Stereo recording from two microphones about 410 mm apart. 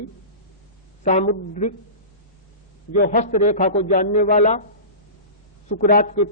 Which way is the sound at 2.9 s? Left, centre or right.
Left.